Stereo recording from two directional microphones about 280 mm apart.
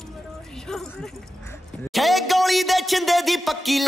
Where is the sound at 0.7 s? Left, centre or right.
Centre.